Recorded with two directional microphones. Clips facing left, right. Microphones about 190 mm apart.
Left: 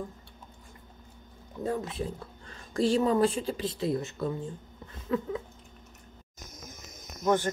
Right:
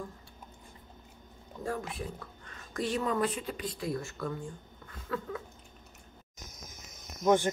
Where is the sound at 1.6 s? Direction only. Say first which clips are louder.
Left 4 dB; 20° left (ahead or behind).